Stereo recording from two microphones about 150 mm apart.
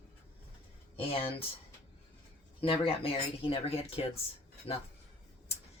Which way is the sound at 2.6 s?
35° left (ahead or behind).